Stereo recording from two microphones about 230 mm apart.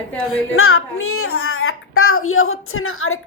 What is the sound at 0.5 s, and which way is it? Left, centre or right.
A child's voice, left.